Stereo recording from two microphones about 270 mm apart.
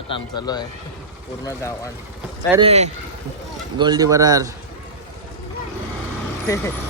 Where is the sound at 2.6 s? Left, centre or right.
Right.